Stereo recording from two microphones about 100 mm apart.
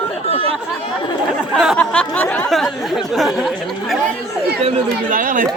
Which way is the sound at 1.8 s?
15° left (ahead or behind).